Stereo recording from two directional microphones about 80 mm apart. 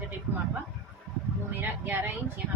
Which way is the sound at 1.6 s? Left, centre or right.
Right.